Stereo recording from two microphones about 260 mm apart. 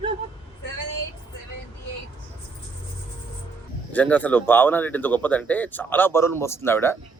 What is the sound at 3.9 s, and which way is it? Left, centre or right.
Speech, centre.